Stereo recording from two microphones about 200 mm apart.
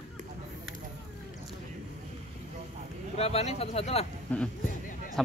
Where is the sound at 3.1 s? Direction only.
30° left (ahead or behind).